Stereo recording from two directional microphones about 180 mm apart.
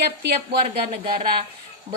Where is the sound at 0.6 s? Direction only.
30° right (ahead or behind).